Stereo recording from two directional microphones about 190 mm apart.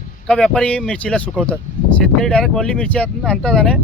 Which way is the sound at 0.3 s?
5° left (ahead or behind).